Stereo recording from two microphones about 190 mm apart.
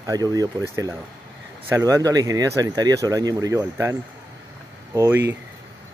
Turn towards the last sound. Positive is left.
turn(degrees=-10)  # may be behind; listen again after turning